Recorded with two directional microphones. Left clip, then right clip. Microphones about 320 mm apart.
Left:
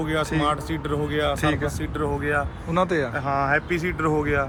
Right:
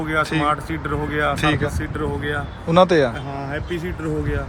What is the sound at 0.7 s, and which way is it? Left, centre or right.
Speech, centre.